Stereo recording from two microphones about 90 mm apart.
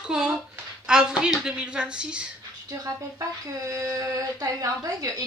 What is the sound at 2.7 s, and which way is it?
A woman's voice, 40° right (ahead or behind).